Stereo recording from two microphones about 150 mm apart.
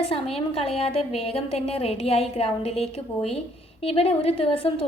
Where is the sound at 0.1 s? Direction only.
40° left (ahead or behind).